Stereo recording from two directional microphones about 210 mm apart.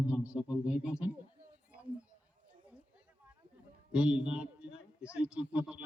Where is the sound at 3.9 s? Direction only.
5° right (ahead or behind).